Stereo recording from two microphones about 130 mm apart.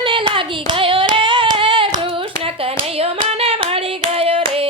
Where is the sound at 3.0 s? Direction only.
50° right (ahead or behind).